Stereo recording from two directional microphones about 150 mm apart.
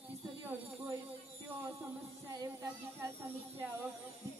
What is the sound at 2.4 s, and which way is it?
Speech, 20° right (ahead or behind).